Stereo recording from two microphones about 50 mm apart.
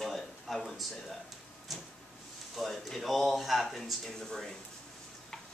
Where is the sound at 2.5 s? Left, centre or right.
Centre.